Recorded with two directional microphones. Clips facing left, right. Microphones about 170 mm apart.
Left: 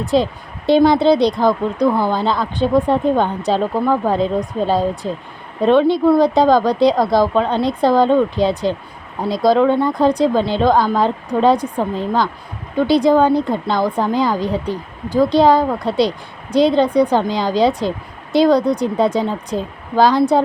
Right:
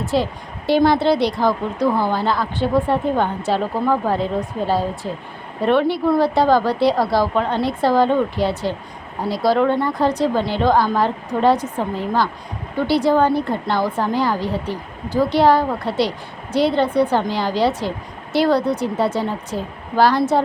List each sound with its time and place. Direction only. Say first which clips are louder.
0.0 s a woman's voice: left 4 dB; 15° left (ahead or behind)